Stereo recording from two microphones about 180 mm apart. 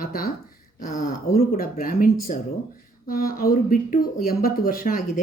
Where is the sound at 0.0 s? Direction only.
55° left (ahead or behind).